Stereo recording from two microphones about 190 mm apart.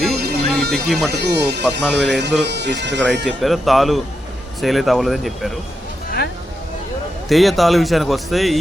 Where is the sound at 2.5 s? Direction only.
65° right (ahead or behind).